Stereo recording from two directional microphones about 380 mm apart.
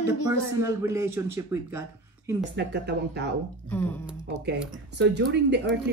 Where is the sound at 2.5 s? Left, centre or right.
Right.